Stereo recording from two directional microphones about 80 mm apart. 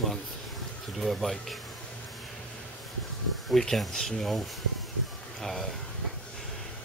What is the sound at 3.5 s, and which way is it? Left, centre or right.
Speech, centre.